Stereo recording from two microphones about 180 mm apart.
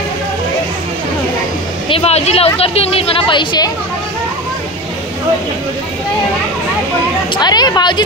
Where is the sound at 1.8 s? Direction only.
35° left (ahead or behind).